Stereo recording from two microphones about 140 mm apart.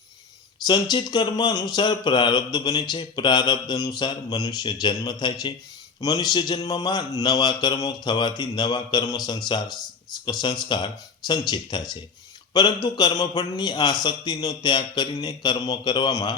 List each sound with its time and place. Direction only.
0.7 s speech: 30° left (ahead or behind)